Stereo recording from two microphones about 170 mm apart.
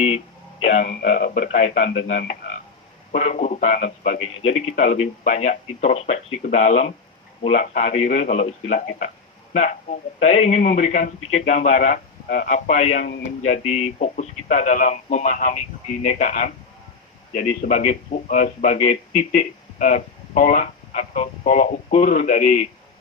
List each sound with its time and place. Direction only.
0.6 s speech: 40° left (ahead or behind)